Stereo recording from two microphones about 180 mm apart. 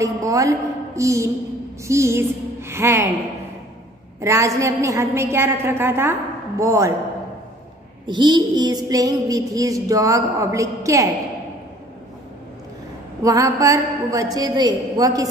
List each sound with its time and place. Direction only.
0.0 s a woman's voice: 20° right (ahead or behind)
4.2 s a woman's voice: 15° right (ahead or behind)
8.1 s child singing: 25° right (ahead or behind)
13.2 s child singing: 20° right (ahead or behind)